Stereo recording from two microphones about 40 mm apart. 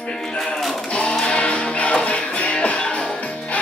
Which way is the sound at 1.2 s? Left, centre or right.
Left.